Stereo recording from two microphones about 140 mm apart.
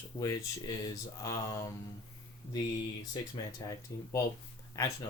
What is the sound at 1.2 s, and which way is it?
Speech, 25° left (ahead or behind).